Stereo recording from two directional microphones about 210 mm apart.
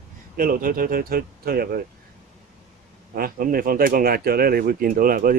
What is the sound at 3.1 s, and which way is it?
Speech, 45° right (ahead or behind).